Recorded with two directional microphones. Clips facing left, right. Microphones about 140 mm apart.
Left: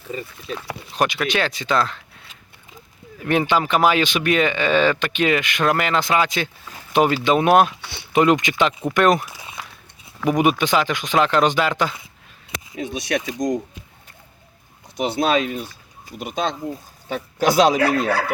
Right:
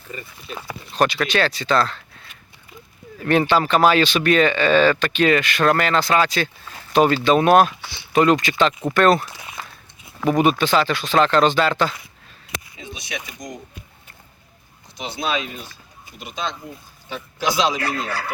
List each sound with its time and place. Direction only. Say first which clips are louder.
0.7 s speech: right 2 dB; 15° left (ahead or behind)
3.2 s speech: right 2 dB; 15° left (ahead or behind)
9.6 s walk: right 1 dB; centre (ahead or behind)
10.2 s speech: right 1 dB; 15° left (ahead or behind)
12.7 s speech: left 13 dB; 80° left
14.9 s speech: left 6 dB; 55° left (ahead or behind)